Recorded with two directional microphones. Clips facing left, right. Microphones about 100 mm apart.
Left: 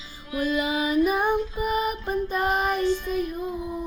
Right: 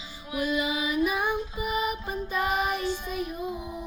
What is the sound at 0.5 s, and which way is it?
Music, 45° left (ahead or behind).